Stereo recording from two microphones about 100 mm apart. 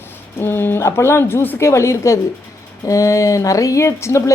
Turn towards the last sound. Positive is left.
turn(degrees=30)  # may be behind; listen again after turning